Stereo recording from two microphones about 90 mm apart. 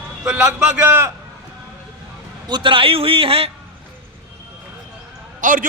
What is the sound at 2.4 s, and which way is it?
A man's voice, 60° right (ahead or behind).